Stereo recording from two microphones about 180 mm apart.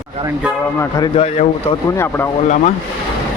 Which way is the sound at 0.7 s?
20° left (ahead or behind).